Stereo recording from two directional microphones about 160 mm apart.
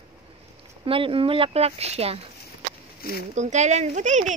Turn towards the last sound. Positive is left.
turn(degrees=-50)  # may be behind; listen again after turning